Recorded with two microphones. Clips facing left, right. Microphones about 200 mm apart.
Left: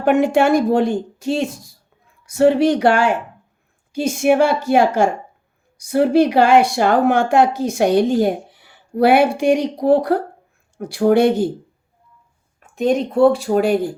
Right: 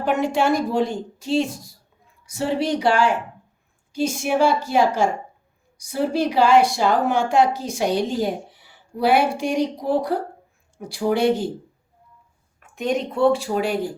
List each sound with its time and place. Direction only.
0.0 s a woman's voice: 65° left (ahead or behind)
12.5 s a sound: 30° left (ahead or behind)
13.4 s speech: 50° left (ahead or behind)